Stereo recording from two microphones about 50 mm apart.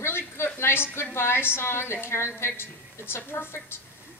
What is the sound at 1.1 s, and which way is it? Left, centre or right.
A woman's voice, left.